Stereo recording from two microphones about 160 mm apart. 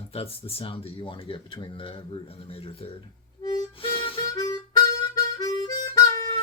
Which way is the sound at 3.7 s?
35° left (ahead or behind).